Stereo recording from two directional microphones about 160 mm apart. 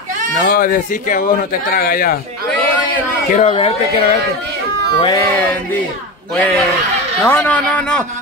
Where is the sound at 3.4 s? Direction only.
40° left (ahead or behind).